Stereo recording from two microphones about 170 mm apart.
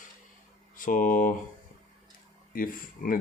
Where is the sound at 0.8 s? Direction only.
50° left (ahead or behind).